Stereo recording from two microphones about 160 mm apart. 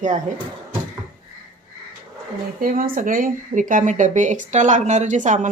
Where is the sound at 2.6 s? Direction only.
60° right (ahead or behind).